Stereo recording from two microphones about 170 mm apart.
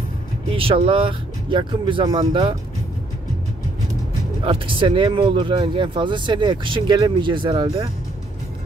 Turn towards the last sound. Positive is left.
turn(degrees=-30)  # may be behind; listen again after turning